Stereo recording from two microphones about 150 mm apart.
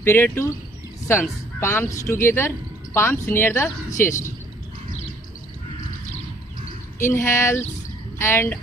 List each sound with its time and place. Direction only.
0.0 s speech: 15° left (ahead or behind)
7.0 s speech: 15° left (ahead or behind)